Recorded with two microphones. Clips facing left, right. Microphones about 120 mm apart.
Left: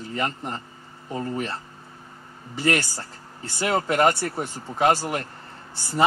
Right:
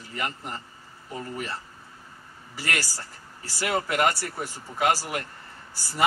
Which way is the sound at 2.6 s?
25° left (ahead or behind).